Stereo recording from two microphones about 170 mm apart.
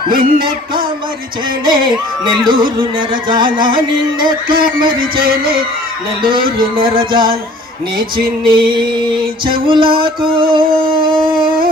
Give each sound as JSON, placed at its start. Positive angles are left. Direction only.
{"t": 0.1, "sound": "music", "side_deg": -55}
{"t": 2.2, "sound": "music", "side_deg": -25}
{"t": 4.9, "sound": "music", "side_deg": -60}
{"t": 6.7, "sound": "music", "side_deg": -30}
{"t": 7.9, "sound": "music", "side_deg": -60}
{"t": 9.5, "sound": "music", "side_deg": -30}
{"t": 10.5, "sound": "a sound", "side_deg": -30}